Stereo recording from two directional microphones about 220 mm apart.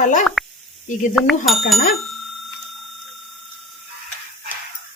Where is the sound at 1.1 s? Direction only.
Centre (ahead or behind).